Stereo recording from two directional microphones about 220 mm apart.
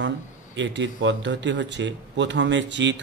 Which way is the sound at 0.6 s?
55° right (ahead or behind).